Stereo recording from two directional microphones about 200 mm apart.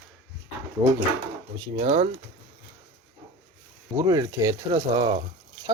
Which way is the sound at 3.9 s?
15° right (ahead or behind).